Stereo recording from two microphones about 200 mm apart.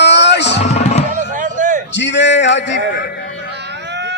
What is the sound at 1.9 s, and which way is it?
Speech, 65° left (ahead or behind).